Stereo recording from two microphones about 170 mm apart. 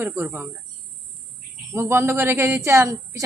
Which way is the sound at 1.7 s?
15° right (ahead or behind).